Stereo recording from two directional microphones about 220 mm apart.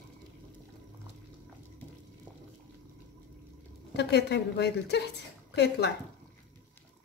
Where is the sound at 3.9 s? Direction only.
50° left (ahead or behind).